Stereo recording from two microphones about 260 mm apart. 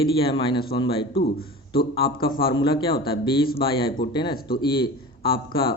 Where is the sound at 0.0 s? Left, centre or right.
Centre.